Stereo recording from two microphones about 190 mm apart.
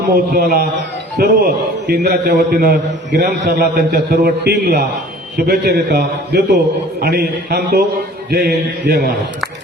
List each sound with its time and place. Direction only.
0.1 s a man's voice: 55° right (ahead or behind)